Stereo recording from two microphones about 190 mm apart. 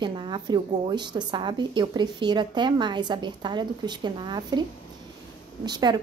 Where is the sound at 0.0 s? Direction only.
25° right (ahead or behind).